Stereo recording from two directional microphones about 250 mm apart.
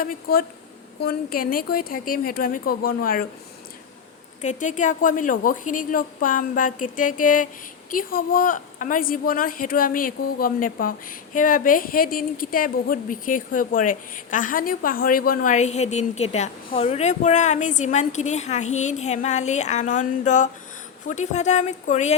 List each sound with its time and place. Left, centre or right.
0.0 s a woman's voice: left
4.4 s a woman's voice: left